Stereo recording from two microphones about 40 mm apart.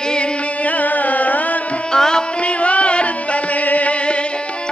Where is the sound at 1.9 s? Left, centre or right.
Centre.